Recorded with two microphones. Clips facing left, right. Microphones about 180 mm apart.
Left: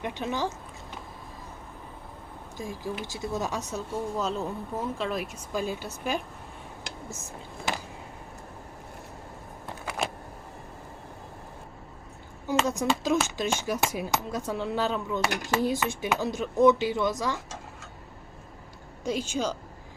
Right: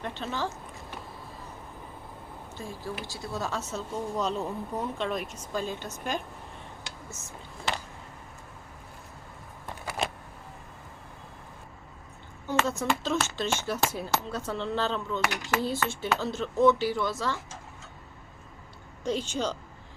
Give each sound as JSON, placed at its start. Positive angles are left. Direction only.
{"t": 0.0, "sound": "speech", "side_deg": 15}
{"t": 2.6, "sound": "speech", "side_deg": 15}
{"t": 12.5, "sound": "speech", "side_deg": 15}
{"t": 19.0, "sound": "speech", "side_deg": 10}